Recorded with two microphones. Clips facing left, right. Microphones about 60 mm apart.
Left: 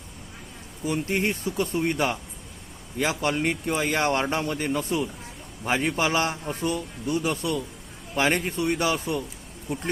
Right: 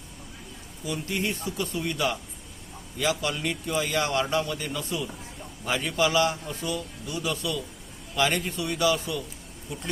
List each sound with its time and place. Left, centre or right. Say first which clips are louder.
0.9 s speech: left 4 dB; left